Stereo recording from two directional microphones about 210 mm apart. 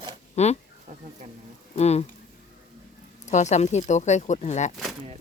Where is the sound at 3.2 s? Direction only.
35° left (ahead or behind).